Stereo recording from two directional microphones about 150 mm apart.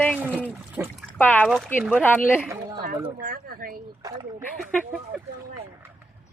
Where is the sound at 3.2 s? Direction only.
70° right (ahead or behind).